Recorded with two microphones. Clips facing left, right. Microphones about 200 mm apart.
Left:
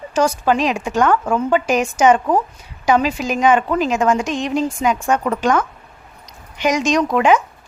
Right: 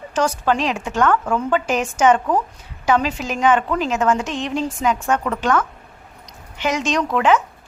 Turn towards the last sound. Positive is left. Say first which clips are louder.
# left 3 dB
turn(degrees=15)  # may be behind; listen again after turning